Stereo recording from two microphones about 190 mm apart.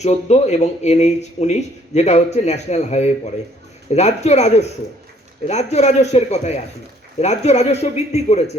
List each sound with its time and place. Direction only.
0.0 s speech: 35° left (ahead or behind)